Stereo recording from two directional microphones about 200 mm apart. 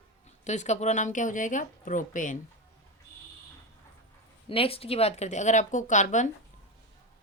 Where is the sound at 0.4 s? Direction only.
35° left (ahead or behind).